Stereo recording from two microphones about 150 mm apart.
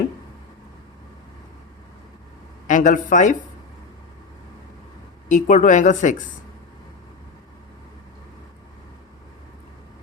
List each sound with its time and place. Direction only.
2.6 s speech: 55° left (ahead or behind)
5.3 s speech: 55° left (ahead or behind)